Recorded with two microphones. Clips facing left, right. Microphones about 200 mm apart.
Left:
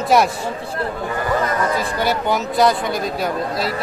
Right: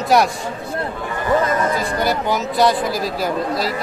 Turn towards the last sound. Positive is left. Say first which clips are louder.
# right 1 dB
turn(degrees=0)  # may be behind; listen again after turning